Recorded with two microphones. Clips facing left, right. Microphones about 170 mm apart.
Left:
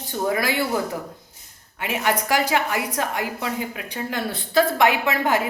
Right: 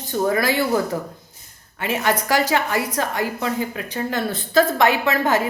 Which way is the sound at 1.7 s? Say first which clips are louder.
Right 2 dB; 10° left (ahead or behind).